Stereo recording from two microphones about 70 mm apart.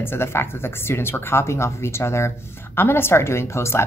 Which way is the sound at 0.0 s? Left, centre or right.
Left.